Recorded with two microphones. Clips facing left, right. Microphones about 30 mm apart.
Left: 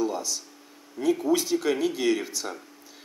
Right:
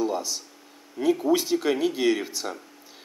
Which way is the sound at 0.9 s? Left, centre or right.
Centre.